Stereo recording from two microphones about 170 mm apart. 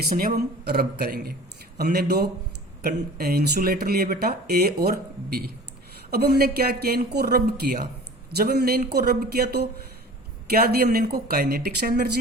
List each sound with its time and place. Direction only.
0.1 s speech: 60° right (ahead or behind)
8.4 s speech: 70° right (ahead or behind)